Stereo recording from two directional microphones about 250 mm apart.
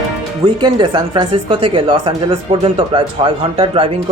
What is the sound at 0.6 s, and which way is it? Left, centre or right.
Speech, centre.